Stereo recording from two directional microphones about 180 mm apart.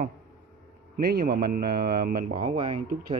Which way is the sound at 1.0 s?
55° right (ahead or behind).